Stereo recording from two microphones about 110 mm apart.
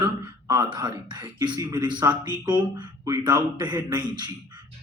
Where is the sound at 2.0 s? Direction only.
30° right (ahead or behind).